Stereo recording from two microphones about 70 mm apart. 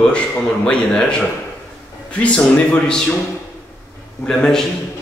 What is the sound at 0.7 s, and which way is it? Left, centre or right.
Speech, centre.